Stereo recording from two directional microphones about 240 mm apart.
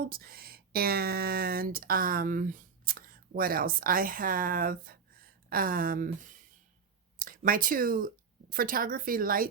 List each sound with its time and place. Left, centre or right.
0.0 s speech: right
7.2 s speech: right